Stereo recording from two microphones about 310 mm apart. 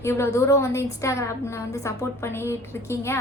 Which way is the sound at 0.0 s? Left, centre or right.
Centre.